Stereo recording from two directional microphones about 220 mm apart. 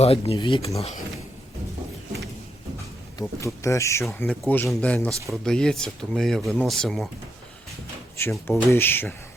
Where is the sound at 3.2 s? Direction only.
15° left (ahead or behind).